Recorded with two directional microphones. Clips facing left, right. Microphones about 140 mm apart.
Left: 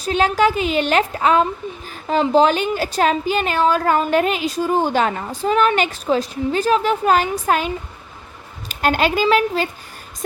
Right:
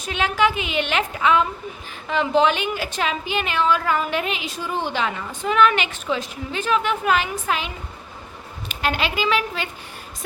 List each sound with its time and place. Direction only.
0.0 s a woman's voice: 40° left (ahead or behind)
8.7 s speech: 45° left (ahead or behind)